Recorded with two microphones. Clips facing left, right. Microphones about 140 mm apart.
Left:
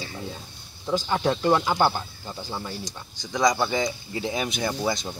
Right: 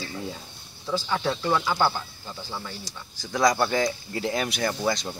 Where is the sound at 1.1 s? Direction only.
20° left (ahead or behind).